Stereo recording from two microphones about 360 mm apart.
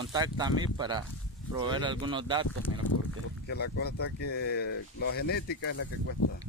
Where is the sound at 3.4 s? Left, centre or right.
Left.